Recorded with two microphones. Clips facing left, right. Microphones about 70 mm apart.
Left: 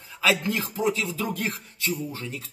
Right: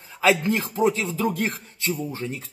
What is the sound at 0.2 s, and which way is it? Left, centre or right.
Speech, right.